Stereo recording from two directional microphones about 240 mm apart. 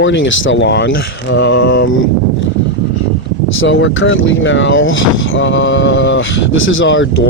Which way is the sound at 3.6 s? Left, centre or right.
Left.